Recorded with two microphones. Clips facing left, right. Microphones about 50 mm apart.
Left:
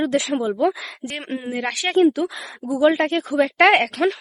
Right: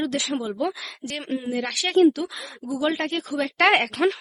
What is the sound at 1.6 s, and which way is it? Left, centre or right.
A woman's voice, left.